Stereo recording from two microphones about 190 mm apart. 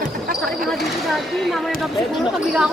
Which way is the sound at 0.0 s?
50° right (ahead or behind).